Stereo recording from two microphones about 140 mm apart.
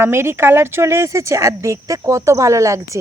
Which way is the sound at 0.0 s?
15° right (ahead or behind).